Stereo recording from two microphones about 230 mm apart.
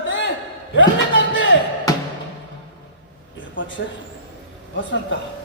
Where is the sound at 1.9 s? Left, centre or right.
Centre.